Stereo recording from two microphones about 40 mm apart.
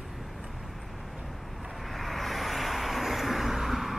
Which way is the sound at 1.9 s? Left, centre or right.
Centre.